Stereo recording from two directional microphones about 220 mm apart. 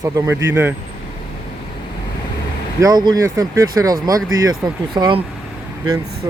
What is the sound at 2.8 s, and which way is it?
Speech, 20° right (ahead or behind).